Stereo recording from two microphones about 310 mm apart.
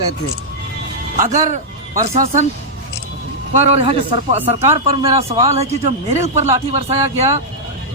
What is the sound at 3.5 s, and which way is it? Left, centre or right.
Speech, right.